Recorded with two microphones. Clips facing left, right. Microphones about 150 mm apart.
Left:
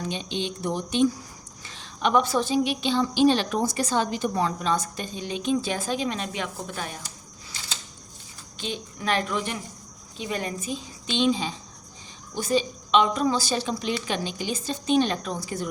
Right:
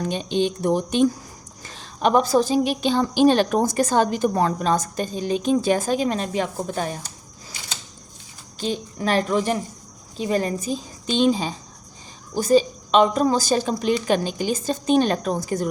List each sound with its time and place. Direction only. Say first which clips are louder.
0.0 s a woman's voice: right 8 dB; 45° right (ahead or behind)
8.5 s a woman's voice: right 7 dB; 40° right (ahead or behind)